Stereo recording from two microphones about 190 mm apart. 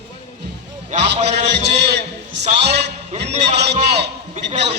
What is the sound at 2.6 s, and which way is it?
Music, 60° right (ahead or behind).